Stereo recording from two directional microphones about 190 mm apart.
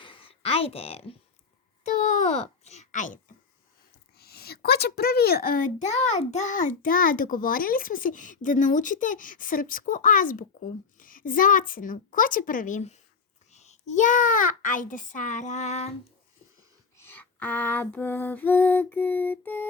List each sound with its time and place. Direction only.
0.0 s a sound: 30° left (ahead or behind)
1.8 s a child's voice: 40° left (ahead or behind)
4.2 s a child's voice: 55° left (ahead or behind); by 15.9 s 35° left (ahead or behind)
17.0 s lullaby: 10° left (ahead or behind)